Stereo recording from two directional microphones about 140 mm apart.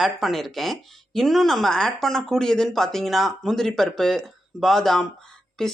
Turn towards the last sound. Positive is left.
turn(degrees=5)  # may be behind; listen again after turning